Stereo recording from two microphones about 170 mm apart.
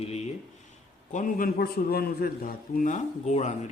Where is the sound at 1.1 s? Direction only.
50° left (ahead or behind).